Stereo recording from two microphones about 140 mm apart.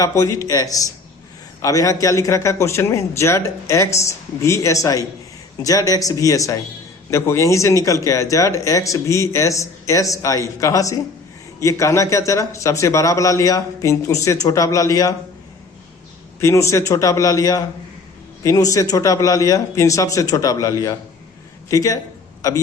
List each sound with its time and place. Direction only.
0.0 s a man's voice: 20° left (ahead or behind)
16.4 s a man's voice: 20° left (ahead or behind)